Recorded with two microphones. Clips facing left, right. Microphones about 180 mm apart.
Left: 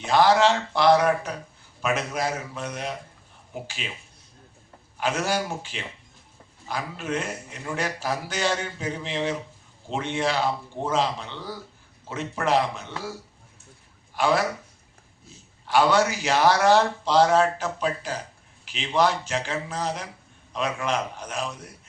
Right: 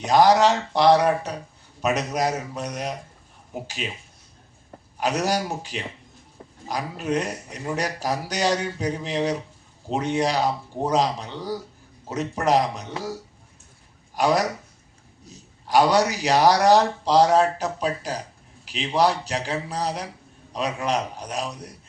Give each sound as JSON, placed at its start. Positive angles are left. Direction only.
{"t": 0.0, "sound": "a man's voice", "side_deg": -40}
{"t": 4.9, "sound": "a man's voice", "side_deg": -40}
{"t": 14.2, "sound": "a man's voice", "side_deg": -40}